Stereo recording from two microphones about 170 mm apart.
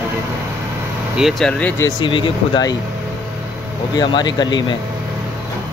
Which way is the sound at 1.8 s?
30° left (ahead or behind).